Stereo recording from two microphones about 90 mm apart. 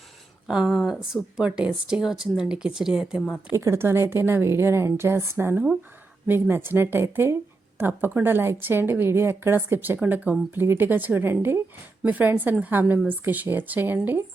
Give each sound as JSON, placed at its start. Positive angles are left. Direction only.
{"t": 0.4, "sound": "speech", "side_deg": -5}
{"t": 3.5, "sound": "a woman's voice", "side_deg": -30}